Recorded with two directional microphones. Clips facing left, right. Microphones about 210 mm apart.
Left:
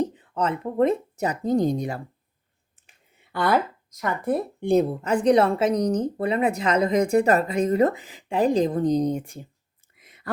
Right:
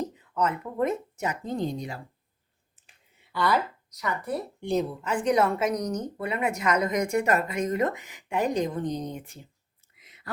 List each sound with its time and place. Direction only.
0.0 s speech: 30° left (ahead or behind); by 2.0 s 45° left (ahead or behind)
3.3 s speech: 50° left (ahead or behind)
5.0 s a woman's voice: 35° left (ahead or behind)
10.0 s whispering: 50° left (ahead or behind)